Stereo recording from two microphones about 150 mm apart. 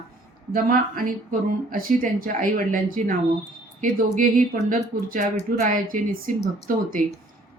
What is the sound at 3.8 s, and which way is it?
Speech, 65° right (ahead or behind).